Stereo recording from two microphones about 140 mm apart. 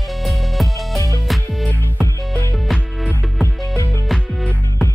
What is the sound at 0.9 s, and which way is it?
Music, 20° left (ahead or behind).